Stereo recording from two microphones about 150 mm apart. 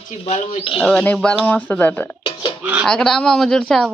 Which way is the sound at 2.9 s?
5° left (ahead or behind).